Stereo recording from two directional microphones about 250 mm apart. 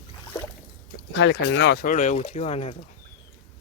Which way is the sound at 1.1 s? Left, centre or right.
Left.